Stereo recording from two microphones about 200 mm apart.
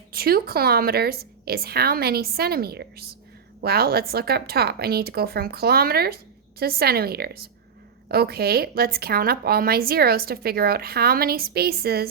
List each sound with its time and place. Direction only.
0.1 s a woman's voice: 50° right (ahead or behind)